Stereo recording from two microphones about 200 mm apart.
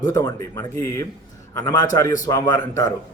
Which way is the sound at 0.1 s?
15° left (ahead or behind).